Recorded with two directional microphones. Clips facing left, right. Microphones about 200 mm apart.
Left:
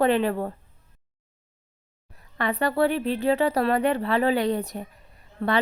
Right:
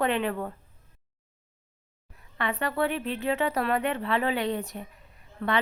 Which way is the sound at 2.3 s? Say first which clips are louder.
Left 5 dB; 35° left (ahead or behind).